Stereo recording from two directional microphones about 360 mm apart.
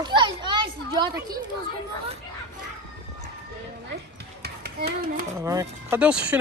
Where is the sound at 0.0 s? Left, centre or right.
Centre.